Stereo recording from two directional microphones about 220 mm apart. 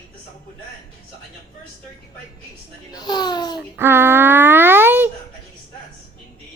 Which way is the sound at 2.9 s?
20° left (ahead or behind).